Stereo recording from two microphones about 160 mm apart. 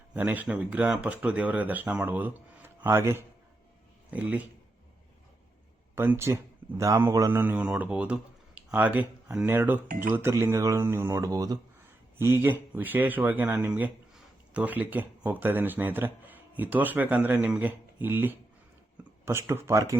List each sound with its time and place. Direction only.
0.1 s speech: 10° right (ahead or behind)
5.9 s speech: 15° right (ahead or behind)
7.4 s speech: 10° right (ahead or behind)